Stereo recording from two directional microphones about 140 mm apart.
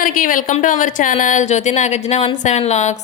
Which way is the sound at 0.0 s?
75° left (ahead or behind).